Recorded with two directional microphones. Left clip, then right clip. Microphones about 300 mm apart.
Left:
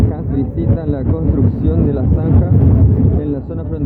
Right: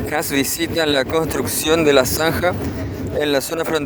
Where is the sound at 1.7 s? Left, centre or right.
Right.